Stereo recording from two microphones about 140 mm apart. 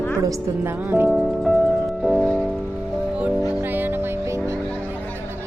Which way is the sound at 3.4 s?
15° right (ahead or behind).